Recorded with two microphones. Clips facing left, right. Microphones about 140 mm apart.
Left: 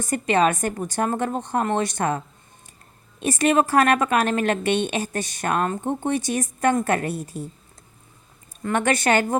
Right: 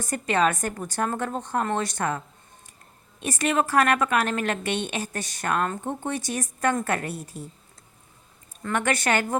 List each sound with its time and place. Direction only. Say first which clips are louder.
0.0 s a woman's voice: left 3 dB; 20° left (ahead or behind)
8.7 s a woman's voice: left 4 dB; 25° left (ahead or behind)